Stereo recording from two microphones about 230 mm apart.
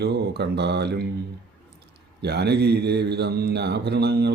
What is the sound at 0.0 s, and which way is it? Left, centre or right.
Speech, right.